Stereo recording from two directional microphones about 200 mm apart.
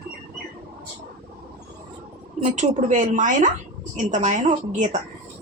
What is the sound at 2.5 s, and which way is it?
Speech, 35° right (ahead or behind).